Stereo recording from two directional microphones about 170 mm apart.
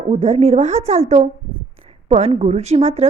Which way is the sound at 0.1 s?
40° right (ahead or behind).